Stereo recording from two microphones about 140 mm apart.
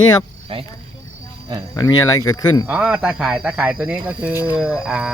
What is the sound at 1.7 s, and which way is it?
Speech, 25° left (ahead or behind).